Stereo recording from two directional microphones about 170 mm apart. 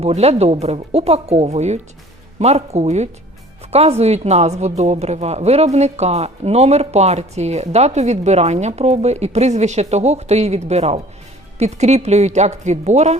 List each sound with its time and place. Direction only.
0.0 s speech: 40° right (ahead or behind)